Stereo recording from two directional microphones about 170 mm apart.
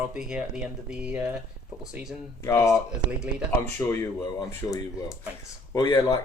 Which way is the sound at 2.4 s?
15° left (ahead or behind).